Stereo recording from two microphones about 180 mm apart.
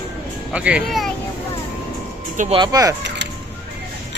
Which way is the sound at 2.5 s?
20° right (ahead or behind).